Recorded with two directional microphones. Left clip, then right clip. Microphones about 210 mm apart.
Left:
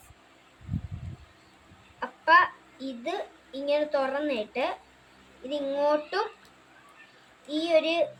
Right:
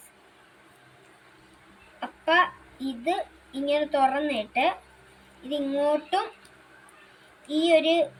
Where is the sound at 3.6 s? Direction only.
30° left (ahead or behind).